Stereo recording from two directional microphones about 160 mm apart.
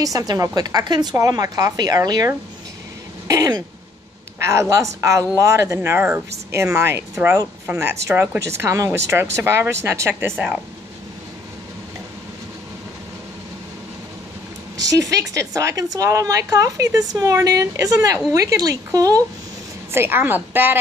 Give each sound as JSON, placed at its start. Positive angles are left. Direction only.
{"t": 0.0, "sound": "a woman's voice", "side_deg": -25}
{"t": 14.8, "sound": "a woman's voice", "side_deg": -20}